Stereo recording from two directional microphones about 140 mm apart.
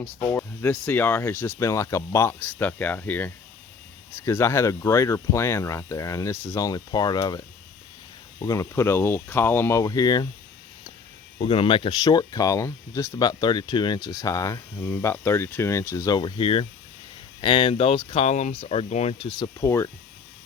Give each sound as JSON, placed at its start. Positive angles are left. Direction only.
{"t": 0.2, "sound": "speech", "side_deg": 15}
{"t": 11.3, "sound": "speech", "side_deg": 40}
{"t": 19.5, "sound": "speech", "side_deg": 20}